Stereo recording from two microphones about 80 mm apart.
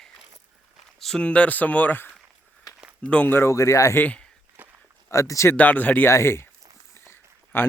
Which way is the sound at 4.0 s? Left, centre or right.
Centre.